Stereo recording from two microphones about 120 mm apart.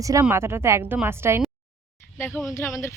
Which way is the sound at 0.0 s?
25° right (ahead or behind).